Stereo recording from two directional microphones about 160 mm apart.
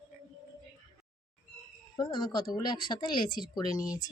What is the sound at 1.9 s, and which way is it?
Speech, 25° left (ahead or behind).